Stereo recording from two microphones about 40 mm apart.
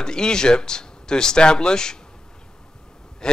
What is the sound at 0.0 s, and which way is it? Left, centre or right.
A man's voice, centre.